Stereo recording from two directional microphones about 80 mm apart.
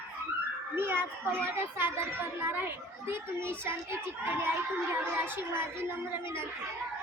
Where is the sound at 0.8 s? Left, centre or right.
Right.